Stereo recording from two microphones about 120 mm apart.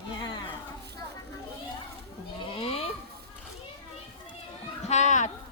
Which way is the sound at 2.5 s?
55° left (ahead or behind).